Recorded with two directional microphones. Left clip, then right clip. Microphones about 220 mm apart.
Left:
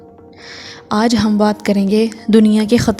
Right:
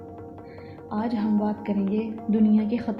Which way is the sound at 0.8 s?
45° left (ahead or behind).